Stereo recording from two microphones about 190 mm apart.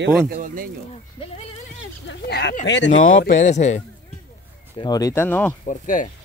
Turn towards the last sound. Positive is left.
turn(degrees=40)  # may be behind; listen again after turning